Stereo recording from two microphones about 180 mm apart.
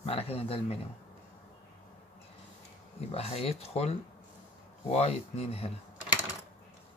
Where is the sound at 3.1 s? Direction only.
35° left (ahead or behind).